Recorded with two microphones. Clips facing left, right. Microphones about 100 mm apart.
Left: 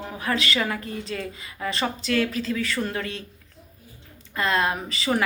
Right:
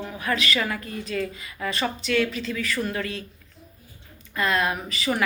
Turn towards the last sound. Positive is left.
turn(degrees=30)  # may be behind; listen again after turning